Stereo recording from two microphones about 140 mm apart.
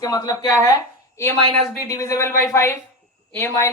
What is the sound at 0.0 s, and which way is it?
Speech, 25° left (ahead or behind).